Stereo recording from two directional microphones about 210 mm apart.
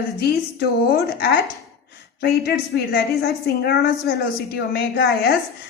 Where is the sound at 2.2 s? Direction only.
50° left (ahead or behind).